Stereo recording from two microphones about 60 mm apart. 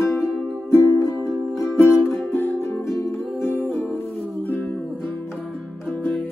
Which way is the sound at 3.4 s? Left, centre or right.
Left.